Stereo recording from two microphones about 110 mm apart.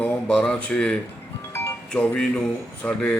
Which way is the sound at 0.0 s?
10° left (ahead or behind).